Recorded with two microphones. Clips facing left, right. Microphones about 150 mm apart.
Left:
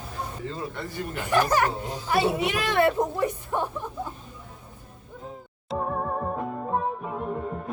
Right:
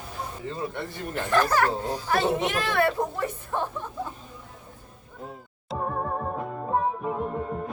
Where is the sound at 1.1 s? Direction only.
15° left (ahead or behind).